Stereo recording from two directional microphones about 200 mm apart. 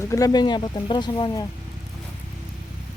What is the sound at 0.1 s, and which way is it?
Speech, 20° left (ahead or behind).